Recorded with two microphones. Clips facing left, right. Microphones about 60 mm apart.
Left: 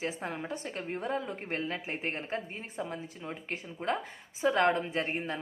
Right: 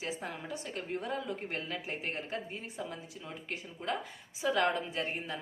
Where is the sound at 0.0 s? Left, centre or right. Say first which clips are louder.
Left 4 dB; left.